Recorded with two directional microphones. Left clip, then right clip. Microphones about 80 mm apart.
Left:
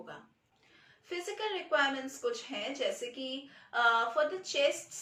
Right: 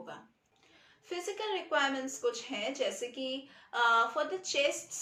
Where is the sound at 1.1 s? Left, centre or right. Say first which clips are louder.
Right 1 dB; right.